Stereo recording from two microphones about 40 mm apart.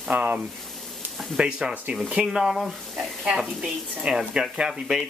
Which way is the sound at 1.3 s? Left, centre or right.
Centre.